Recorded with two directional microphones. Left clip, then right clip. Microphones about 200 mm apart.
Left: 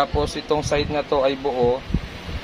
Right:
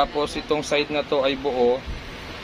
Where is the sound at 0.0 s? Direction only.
10° left (ahead or behind).